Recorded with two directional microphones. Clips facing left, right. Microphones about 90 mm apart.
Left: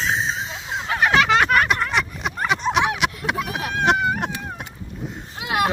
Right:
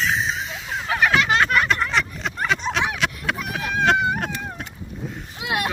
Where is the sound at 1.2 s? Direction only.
75° left (ahead or behind).